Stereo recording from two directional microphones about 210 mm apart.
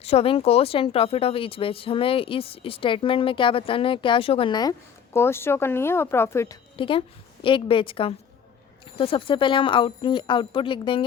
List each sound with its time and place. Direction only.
0.0 s speech: 30° left (ahead or behind)
5.1 s a woman's voice: 10° left (ahead or behind)
6.7 s speech: 25° left (ahead or behind)